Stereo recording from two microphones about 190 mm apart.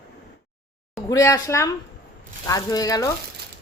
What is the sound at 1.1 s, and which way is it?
A woman's voice, 15° left (ahead or behind).